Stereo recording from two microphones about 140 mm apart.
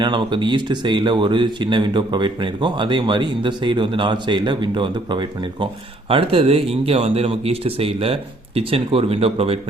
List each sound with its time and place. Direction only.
0.0 s speech: 35° right (ahead or behind)